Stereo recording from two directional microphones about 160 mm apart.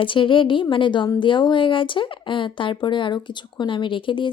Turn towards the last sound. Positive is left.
turn(degrees=30)  # may be behind; listen again after turning